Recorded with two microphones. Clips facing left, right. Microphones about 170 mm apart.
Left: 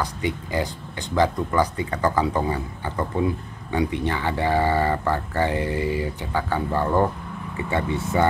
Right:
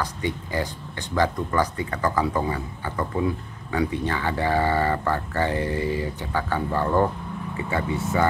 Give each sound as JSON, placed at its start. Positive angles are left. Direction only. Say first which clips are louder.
{"t": 0.0, "sound": "a man's voice", "louder": "left 1 dB", "side_deg": 15}